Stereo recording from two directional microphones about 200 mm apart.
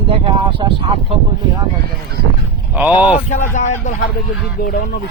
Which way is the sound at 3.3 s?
35° left (ahead or behind).